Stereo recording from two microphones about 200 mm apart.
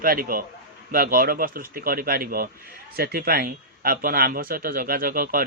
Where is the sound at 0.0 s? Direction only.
45° right (ahead or behind).